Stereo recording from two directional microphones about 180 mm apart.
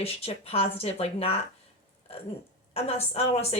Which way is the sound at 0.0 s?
35° left (ahead or behind).